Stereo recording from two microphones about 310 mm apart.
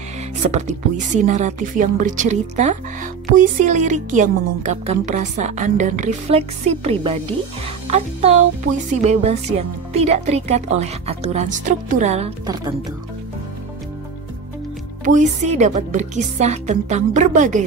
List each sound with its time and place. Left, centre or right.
0.4 s speech: right
15.0 s speech: right